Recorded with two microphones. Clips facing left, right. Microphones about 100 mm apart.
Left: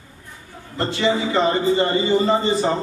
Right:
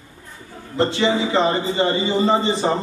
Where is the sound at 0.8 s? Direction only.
25° right (ahead or behind).